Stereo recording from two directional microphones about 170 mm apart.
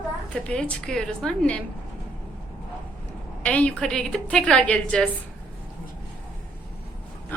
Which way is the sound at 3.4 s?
5° left (ahead or behind).